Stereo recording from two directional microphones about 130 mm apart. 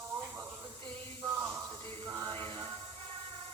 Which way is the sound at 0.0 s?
20° right (ahead or behind).